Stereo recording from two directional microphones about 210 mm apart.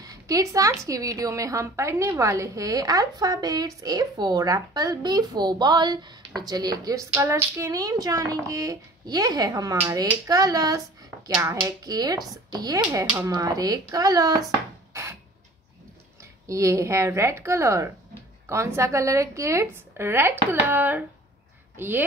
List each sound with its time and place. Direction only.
0.0 s a woman's voice: 15° right (ahead or behind)
16.4 s a woman's voice: 15° right (ahead or behind)